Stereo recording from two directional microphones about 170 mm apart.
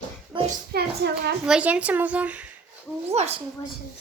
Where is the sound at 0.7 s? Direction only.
75° right (ahead or behind).